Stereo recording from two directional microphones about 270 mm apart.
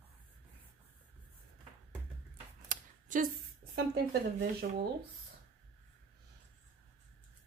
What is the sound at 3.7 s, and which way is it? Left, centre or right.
Speech, right.